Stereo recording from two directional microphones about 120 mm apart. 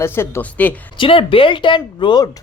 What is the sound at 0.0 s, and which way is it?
Speech, 20° left (ahead or behind).